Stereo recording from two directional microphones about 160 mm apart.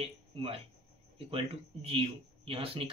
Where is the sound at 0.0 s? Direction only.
35° right (ahead or behind).